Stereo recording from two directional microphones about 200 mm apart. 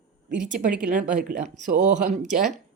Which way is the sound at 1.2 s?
40° right (ahead or behind).